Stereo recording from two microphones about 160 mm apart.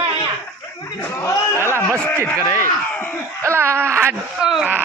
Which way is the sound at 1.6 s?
15° right (ahead or behind).